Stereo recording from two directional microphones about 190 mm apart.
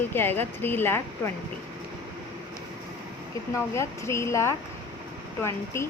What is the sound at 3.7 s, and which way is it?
A woman's voice, 15° left (ahead or behind).